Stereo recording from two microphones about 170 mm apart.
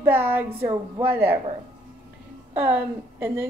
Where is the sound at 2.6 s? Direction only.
10° right (ahead or behind).